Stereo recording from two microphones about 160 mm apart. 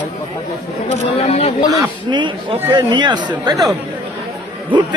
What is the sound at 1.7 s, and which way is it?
Speech, 30° right (ahead or behind).